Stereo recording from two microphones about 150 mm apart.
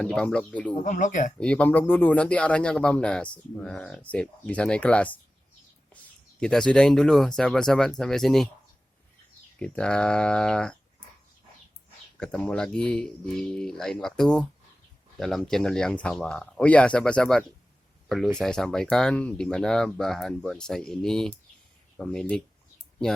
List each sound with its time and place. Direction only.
0.0 s speech: 5° left (ahead or behind)
0.9 s speech: 55° left (ahead or behind)
1.4 s speech: 10° left (ahead or behind)
6.4 s speech: 5° left (ahead or behind)
9.6 s speech: 5° left (ahead or behind)
12.2 s speech: 5° left (ahead or behind)